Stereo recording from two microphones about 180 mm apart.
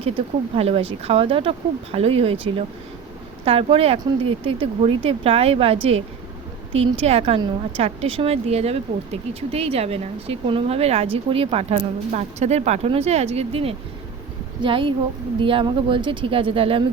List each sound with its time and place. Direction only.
0.5 s a woman's voice: 35° right (ahead or behind)